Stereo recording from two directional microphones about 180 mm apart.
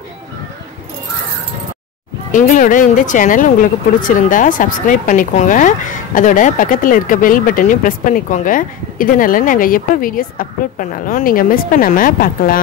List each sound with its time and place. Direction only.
2.3 s speech: 50° left (ahead or behind)